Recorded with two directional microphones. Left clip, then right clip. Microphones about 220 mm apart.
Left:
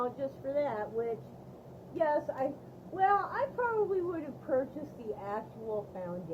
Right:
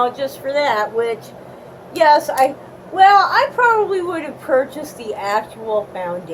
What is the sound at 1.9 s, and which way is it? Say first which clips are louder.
A woman's voice: right 19 dB; 10° right (ahead or behind).